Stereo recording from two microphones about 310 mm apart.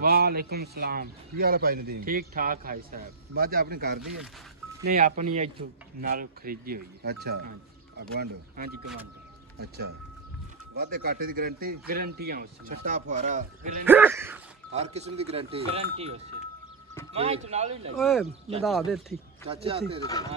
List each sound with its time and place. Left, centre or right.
0.0 s a man's voice: right
10.8 s a man's voice: right
13.8 s speech: centre
14.7 s a man's voice: right
17.9 s speech: centre
19.5 s speech: centre
20.0 s speech: centre